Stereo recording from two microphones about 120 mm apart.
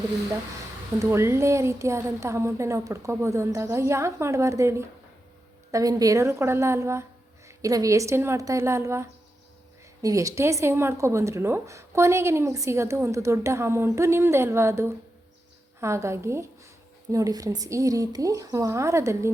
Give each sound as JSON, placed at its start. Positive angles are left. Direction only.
{"t": 0.9, "sound": "speech", "side_deg": -25}